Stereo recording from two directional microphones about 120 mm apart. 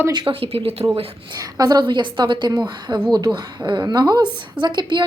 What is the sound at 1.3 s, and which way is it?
A woman's voice, 35° right (ahead or behind).